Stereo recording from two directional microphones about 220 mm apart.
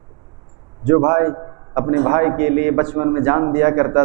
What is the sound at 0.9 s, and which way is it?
A man's voice, 20° right (ahead or behind).